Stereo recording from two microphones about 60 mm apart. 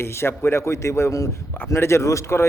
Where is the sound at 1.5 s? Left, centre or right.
Left.